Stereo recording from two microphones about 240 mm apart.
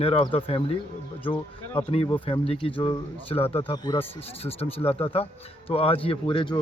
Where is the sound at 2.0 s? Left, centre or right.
Centre.